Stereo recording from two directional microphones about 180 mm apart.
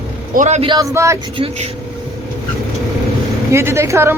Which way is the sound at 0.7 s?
15° right (ahead or behind).